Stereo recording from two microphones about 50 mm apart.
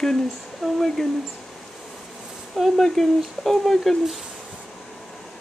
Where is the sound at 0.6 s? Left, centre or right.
Centre.